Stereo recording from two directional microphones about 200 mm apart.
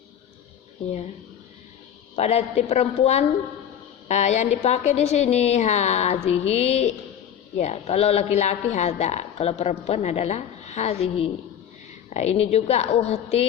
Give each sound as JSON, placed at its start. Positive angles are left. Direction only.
{"t": 2.1, "sound": "a woman's voice", "side_deg": 30}